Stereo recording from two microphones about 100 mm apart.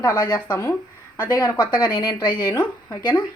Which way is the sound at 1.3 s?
40° left (ahead or behind).